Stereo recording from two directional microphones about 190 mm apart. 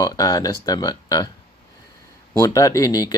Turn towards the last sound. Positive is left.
turn(degrees=20)  # may be behind; listen again after turning